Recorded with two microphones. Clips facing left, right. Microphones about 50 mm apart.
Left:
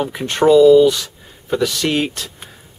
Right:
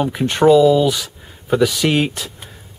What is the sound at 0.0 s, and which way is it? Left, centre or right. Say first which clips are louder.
Speech: right 1 dB; centre.